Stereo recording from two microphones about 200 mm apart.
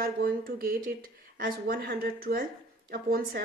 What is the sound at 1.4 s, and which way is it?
Speech, 50° right (ahead or behind).